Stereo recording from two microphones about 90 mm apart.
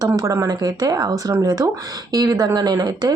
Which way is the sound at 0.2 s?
40° right (ahead or behind).